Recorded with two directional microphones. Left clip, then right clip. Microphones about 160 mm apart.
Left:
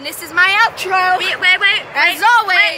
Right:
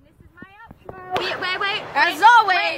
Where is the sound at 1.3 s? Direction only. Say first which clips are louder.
Left 11 dB; 40° right (ahead or behind).